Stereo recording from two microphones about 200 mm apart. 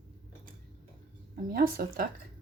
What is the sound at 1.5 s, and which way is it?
Speech, 50° right (ahead or behind).